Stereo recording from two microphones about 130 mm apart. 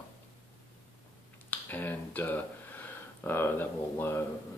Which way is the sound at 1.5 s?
15° left (ahead or behind).